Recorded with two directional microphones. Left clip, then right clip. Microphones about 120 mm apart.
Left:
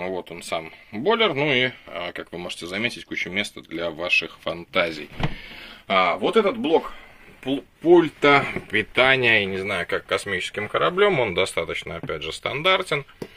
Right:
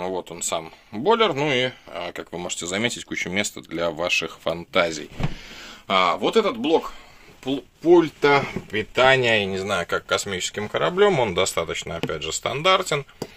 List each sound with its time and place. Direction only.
0.0 s speech: 10° right (ahead or behind)
1.3 s speech: 10° left (ahead or behind)
2.3 s speech: 30° right (ahead or behind)
5.2 s speech: 20° right (ahead or behind)
6.2 s speech: centre (ahead or behind)
7.8 s speech: 10° left (ahead or behind)